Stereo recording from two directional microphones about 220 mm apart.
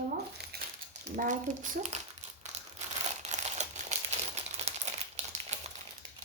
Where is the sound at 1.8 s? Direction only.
30° right (ahead or behind).